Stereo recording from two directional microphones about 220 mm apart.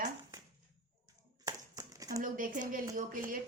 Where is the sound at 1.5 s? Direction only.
15° right (ahead or behind).